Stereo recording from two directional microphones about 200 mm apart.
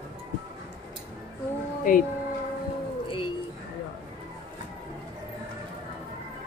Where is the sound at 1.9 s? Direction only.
45° left (ahead or behind).